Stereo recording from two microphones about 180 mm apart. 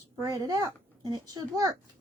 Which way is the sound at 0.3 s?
20° right (ahead or behind).